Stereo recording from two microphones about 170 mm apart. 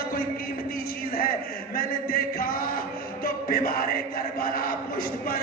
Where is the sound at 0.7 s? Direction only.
60° left (ahead or behind).